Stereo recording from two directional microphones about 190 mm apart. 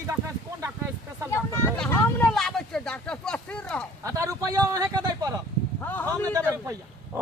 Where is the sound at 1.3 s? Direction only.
15° left (ahead or behind).